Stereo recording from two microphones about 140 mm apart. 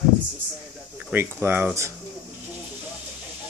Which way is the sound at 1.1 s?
15° right (ahead or behind).